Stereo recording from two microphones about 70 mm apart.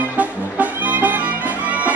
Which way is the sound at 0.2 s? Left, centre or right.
Right.